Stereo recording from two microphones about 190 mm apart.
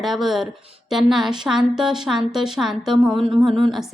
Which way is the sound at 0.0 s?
Centre (ahead or behind).